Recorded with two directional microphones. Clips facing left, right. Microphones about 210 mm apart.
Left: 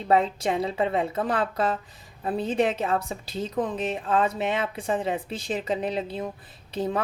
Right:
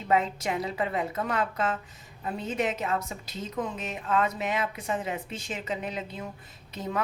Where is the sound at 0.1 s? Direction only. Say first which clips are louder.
Left 4 dB; 30° left (ahead or behind).